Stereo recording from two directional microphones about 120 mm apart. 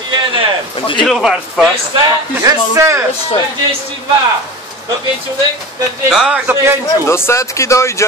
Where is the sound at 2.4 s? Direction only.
25° right (ahead or behind).